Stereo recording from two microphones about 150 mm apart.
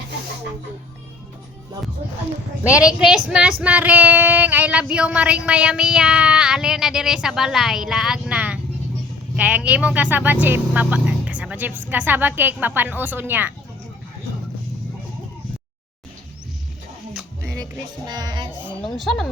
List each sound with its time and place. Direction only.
2.6 s child singing: 5° right (ahead or behind)
18.0 s speech: 30° right (ahead or behind)
18.9 s speech: 5° left (ahead or behind)